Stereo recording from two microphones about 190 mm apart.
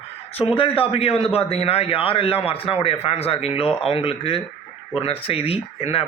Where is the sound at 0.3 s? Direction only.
30° left (ahead or behind).